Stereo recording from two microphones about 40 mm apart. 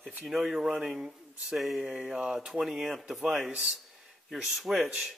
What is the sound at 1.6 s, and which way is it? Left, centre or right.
Speech, centre.